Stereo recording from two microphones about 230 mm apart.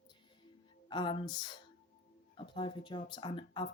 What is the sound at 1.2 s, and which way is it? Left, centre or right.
Speech, centre.